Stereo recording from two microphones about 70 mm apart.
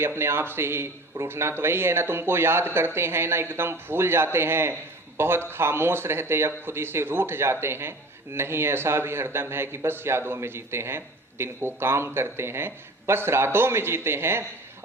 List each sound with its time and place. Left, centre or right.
0.0 s speech: right